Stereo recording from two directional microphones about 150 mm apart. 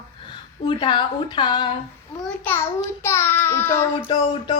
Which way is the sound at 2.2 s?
10° left (ahead or behind).